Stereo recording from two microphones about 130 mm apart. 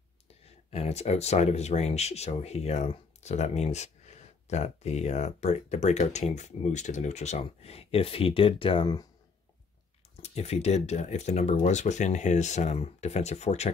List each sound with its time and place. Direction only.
0.7 s speech: 55° left (ahead or behind)
10.2 s speech: 55° left (ahead or behind)